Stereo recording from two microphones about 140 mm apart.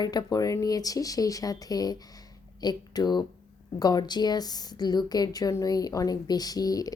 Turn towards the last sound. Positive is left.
turn(degrees=25)  # may be behind; listen again after turning